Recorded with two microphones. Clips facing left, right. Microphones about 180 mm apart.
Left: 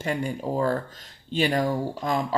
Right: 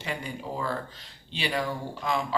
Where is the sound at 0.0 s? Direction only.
45° left (ahead or behind).